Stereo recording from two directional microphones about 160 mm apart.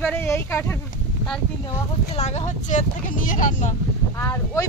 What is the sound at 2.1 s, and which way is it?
Speech, 45° left (ahead or behind).